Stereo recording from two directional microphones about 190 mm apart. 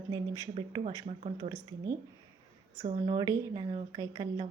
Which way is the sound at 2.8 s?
35° right (ahead or behind).